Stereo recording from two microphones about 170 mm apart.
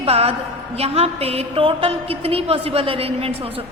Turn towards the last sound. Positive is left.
turn(degrees=-35)  # may be behind; listen again after turning